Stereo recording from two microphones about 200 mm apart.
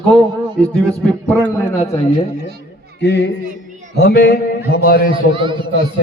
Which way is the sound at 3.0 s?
60° left (ahead or behind).